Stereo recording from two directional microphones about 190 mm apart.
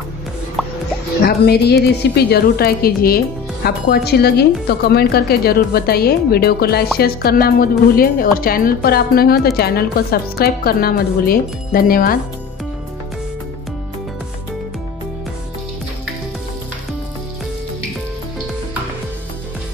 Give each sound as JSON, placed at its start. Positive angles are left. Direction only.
{"t": 0.6, "sound": "music", "side_deg": 0}
{"t": 1.2, "sound": "a woman's voice", "side_deg": 55}